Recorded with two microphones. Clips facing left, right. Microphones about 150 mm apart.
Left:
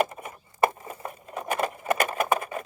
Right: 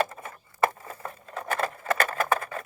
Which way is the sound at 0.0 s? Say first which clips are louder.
Left 2 dB; 15° left (ahead or behind).